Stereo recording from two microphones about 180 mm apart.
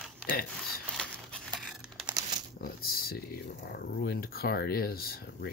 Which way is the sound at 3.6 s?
60° left (ahead or behind).